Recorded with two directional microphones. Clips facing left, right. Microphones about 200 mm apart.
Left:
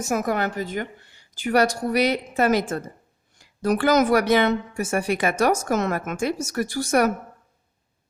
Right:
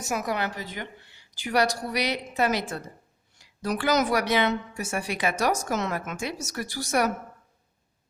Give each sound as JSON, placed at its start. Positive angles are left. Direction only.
{"t": 0.0, "sound": "a woman's voice", "side_deg": 50}